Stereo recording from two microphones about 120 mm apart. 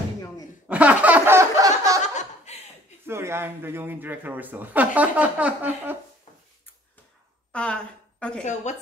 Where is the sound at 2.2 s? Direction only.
70° left (ahead or behind).